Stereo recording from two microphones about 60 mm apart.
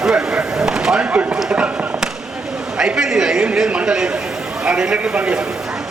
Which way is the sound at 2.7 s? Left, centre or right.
Centre.